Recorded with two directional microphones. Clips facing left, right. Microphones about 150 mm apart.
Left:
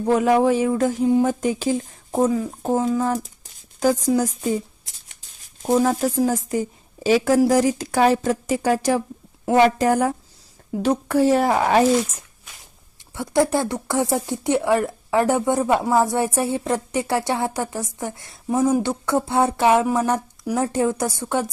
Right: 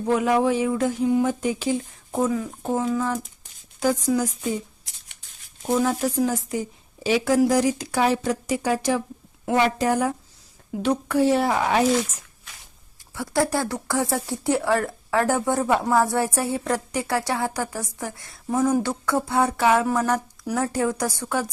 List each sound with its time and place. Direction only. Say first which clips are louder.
0.0 s speech: left 3 dB; 40° left (ahead or behind)
13.1 s speech: left 4 dB; 20° left (ahead or behind)